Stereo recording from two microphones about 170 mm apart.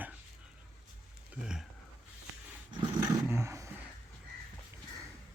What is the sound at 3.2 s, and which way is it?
Roaring cats, 15° right (ahead or behind).